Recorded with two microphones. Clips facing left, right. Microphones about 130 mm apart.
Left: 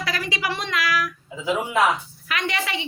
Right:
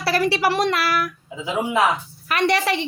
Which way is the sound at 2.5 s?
45° right (ahead or behind).